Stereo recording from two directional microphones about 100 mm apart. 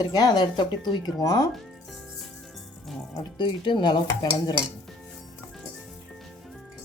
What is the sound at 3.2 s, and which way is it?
Speech, 50° left (ahead or behind).